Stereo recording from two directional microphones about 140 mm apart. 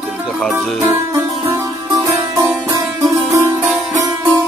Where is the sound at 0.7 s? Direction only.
20° right (ahead or behind).